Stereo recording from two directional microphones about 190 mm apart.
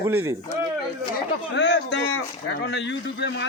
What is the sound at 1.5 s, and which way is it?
A man's voice, 65° left (ahead or behind).